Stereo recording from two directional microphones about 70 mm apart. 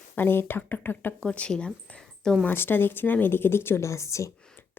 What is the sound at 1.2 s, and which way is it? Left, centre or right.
Speech, centre.